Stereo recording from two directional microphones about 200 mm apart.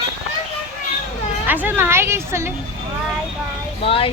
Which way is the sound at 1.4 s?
10° right (ahead or behind).